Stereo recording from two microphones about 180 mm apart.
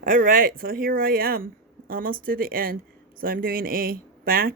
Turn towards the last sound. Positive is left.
turn(degrees=-55)  # may be behind; listen again after turning